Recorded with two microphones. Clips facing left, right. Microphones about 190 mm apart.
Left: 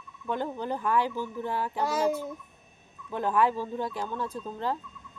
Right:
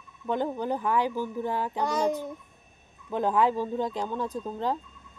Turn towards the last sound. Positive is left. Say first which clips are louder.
# right 2 dB
turn(degrees=-15)  # may be behind; listen again after turning